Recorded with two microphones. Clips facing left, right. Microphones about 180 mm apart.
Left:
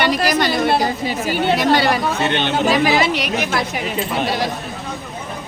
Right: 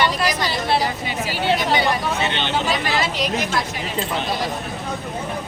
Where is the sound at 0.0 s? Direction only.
70° left (ahead or behind).